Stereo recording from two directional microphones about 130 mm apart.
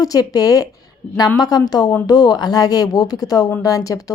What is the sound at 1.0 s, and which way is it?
Speech, 10° left (ahead or behind).